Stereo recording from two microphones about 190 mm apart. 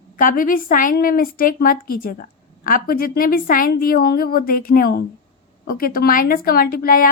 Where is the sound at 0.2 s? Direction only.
45° left (ahead or behind).